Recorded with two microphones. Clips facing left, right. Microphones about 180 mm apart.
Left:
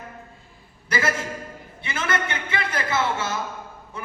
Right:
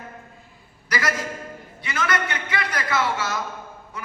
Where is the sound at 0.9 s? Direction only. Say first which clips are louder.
Left 1 dB; 25° left (ahead or behind).